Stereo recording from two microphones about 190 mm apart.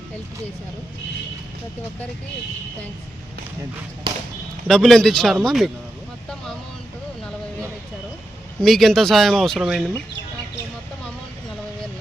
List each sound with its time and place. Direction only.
4.1 s speech: 25° right (ahead or behind)
4.7 s speech: centre (ahead or behind)
8.6 s speech: centre (ahead or behind)